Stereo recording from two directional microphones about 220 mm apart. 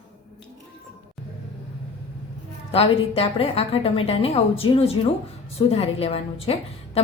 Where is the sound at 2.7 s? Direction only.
25° left (ahead or behind).